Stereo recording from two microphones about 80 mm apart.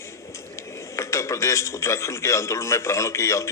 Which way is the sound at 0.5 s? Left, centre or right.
Left.